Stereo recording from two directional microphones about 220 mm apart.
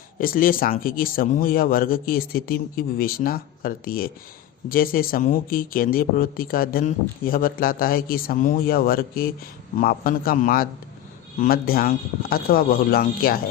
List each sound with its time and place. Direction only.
0.2 s speech: 40° left (ahead or behind)